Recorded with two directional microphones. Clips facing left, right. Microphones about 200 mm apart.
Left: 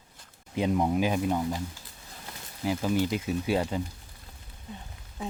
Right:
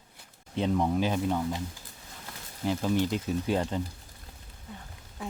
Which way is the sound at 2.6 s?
5° left (ahead or behind).